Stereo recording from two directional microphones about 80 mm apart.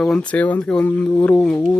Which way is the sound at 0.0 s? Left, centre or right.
Centre.